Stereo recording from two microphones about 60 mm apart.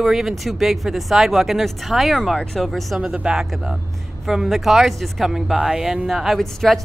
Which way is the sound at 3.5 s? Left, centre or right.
Centre.